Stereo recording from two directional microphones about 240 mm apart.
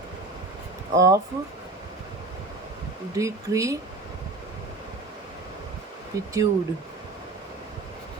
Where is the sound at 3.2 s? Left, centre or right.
Centre.